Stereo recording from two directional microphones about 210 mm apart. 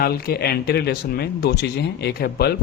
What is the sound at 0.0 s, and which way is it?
Speech, 45° left (ahead or behind).